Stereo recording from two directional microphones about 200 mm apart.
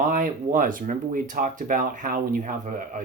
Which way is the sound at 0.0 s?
40° right (ahead or behind).